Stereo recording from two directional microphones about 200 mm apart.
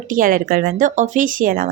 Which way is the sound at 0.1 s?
45° right (ahead or behind).